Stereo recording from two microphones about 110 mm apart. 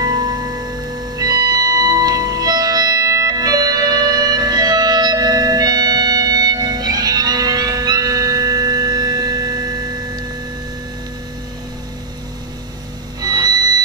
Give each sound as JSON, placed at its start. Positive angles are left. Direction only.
{"t": 0.0, "sound": "music", "side_deg": -40}
{"t": 13.2, "sound": "music", "side_deg": -35}